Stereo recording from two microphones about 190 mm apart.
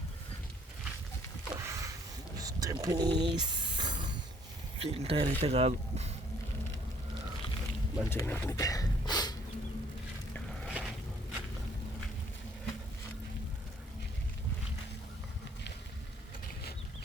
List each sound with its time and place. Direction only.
1.5 s a sound: 15° right (ahead or behind)
2.8 s speech: 20° right (ahead or behind)
8.1 s speech: 10° left (ahead or behind)
10.7 s vehicle: 5° right (ahead or behind)